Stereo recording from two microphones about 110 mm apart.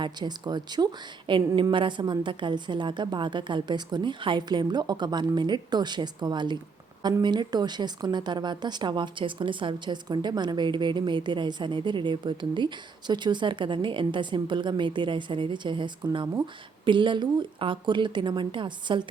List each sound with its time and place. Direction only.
0.0 s a woman's voice: 40° right (ahead or behind)